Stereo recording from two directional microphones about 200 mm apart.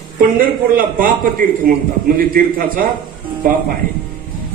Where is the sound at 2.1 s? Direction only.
45° right (ahead or behind).